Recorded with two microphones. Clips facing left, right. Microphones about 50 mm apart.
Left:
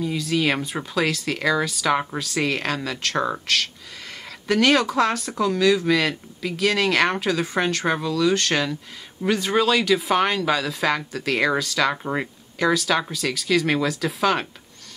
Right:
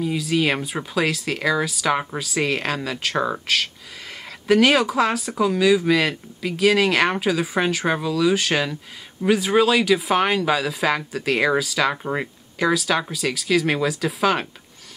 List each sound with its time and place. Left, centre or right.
0.0 s speech: centre